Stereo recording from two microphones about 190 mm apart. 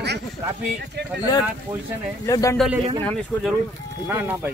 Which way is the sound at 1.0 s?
60° right (ahead or behind).